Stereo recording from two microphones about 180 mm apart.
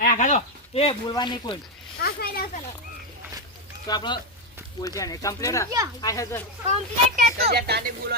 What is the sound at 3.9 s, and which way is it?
Speech, 25° left (ahead or behind).